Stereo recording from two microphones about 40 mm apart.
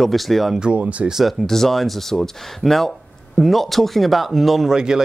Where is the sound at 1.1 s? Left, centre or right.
Centre.